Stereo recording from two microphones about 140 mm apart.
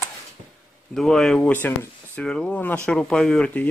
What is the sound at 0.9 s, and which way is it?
Speech, 5° left (ahead or behind).